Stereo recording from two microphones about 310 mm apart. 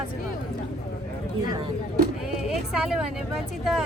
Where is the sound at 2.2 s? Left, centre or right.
Centre.